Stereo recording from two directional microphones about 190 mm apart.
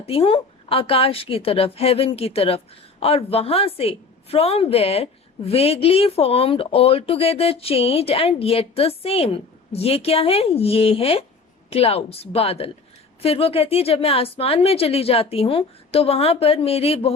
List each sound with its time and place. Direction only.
0.0 s a woman's voice: 30° left (ahead or behind)